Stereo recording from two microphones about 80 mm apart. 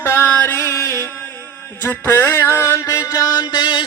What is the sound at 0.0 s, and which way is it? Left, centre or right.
Music, left.